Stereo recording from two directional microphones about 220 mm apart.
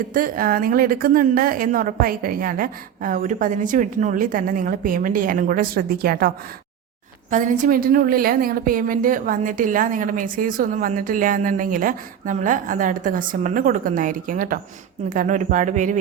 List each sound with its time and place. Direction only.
0.1 s a woman's voice: 40° right (ahead or behind)